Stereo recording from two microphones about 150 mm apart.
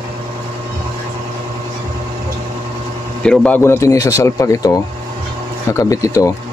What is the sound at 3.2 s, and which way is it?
Speech, 5° left (ahead or behind).